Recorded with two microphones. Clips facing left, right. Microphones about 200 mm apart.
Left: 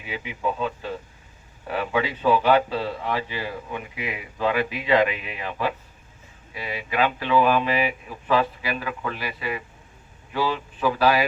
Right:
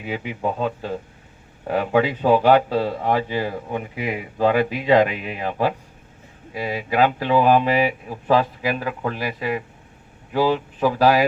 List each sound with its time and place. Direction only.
0.0 s speech: 45° right (ahead or behind)